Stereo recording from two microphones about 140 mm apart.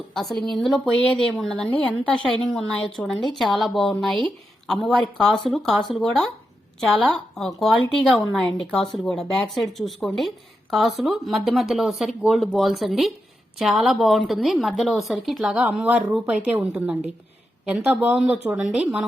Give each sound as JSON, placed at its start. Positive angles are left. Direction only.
{"t": 0.1, "sound": "a woman's voice", "side_deg": 0}
{"t": 7.3, "sound": "a woman's voice", "side_deg": 5}